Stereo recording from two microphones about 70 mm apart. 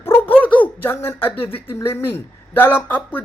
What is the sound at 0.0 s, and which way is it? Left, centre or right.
Speech, left.